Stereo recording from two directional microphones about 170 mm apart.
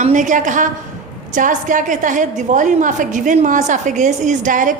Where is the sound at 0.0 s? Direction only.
45° right (ahead or behind).